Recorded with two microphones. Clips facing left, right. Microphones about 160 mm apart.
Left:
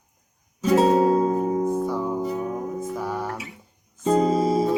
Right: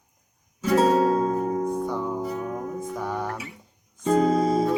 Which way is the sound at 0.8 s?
15° left (ahead or behind).